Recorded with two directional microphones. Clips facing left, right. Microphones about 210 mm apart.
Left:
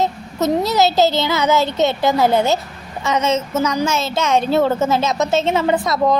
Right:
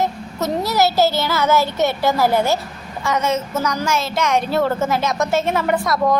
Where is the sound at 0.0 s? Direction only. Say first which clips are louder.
Left 3 dB; 20° left (ahead or behind).